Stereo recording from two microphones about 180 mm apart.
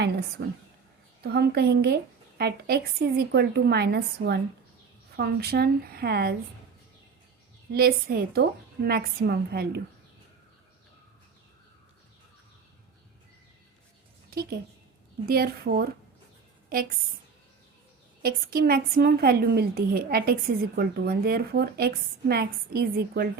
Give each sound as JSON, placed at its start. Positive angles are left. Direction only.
{"t": 0.0, "sound": "a woman's voice", "side_deg": -70}
{"t": 7.7, "sound": "a woman's voice", "side_deg": -55}
{"t": 15.3, "sound": "a woman's voice", "side_deg": -60}
{"t": 18.2, "sound": "a woman's voice", "side_deg": -55}